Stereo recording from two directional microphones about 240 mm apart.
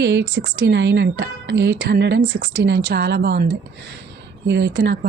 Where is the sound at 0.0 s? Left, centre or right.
Right.